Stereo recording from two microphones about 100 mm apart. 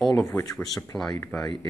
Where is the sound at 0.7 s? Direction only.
5° left (ahead or behind).